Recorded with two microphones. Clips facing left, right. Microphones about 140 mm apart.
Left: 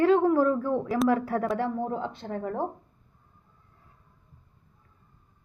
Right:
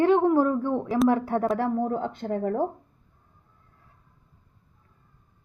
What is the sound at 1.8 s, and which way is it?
Speech, 55° right (ahead or behind).